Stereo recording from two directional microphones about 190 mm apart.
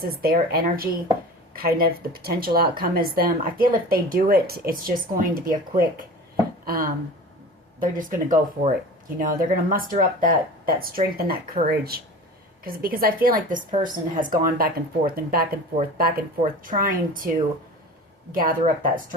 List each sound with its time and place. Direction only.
0.0 s speech: 55° right (ahead or behind)